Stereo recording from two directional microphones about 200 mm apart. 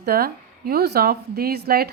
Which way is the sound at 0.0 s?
50° right (ahead or behind).